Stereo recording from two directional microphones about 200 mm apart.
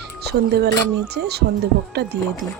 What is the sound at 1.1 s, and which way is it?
Speech, 55° right (ahead or behind).